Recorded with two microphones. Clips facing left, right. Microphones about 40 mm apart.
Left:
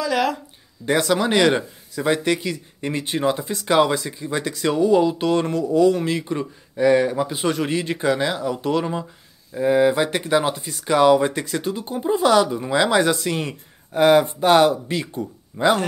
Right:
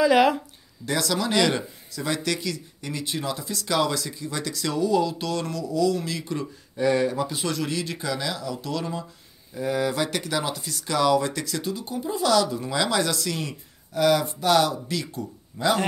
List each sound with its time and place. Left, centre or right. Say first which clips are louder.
0.0 s speech: right 3 dB; centre
0.8 s speech: left 6 dB; left